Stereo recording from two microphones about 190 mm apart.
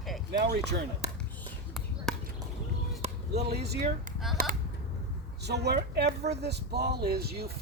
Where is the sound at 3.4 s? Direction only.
60° right (ahead or behind).